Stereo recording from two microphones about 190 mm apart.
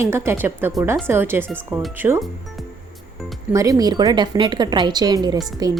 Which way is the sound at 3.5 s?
20° right (ahead or behind).